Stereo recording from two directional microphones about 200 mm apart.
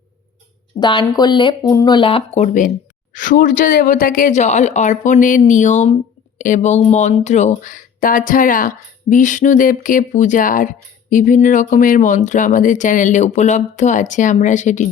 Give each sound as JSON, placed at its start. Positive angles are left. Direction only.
{"t": 0.8, "sound": "speech", "side_deg": 20}